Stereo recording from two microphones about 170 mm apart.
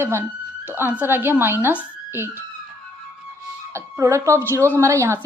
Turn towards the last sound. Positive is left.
turn(degrees=-15)  # may be behind; listen again after turning